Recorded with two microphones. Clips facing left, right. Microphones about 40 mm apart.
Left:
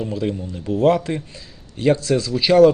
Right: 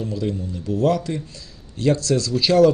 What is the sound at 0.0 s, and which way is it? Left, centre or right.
Speech, left.